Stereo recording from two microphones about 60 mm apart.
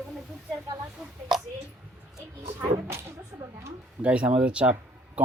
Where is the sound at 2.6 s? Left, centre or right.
Right.